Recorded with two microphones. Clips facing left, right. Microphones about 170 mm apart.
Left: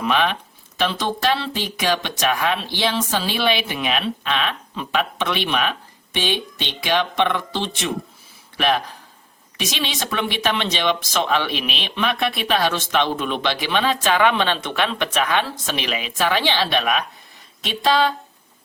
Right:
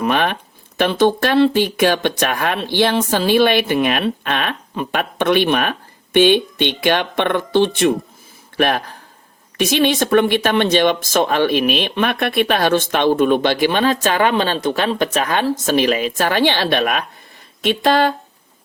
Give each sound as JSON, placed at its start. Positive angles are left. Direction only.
{"t": 0.0, "sound": "speech", "side_deg": -50}